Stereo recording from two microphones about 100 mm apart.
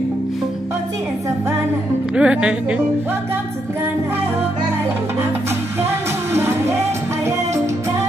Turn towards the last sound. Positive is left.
turn(degrees=-25)  # may be behind; listen again after turning